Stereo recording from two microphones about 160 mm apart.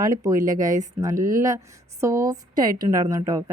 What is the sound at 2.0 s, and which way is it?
A woman's voice, 20° right (ahead or behind).